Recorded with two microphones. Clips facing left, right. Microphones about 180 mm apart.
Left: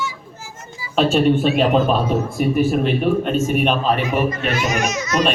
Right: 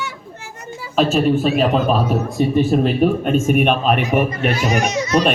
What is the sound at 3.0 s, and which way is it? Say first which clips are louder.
Speech: right 3 dB; 40° right (ahead or behind).